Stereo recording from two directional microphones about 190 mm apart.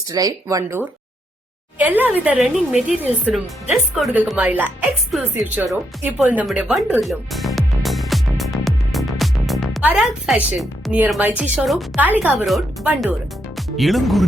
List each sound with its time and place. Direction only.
0.1 s speech: 20° right (ahead or behind)
6.0 s music: 5° right (ahead or behind)
11.5 s speech: centre (ahead or behind)